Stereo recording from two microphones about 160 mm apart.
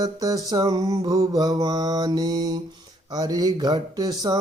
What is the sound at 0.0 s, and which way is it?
Music, 20° right (ahead or behind).